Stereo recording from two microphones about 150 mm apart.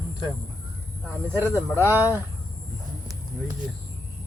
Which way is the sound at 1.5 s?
15° left (ahead or behind).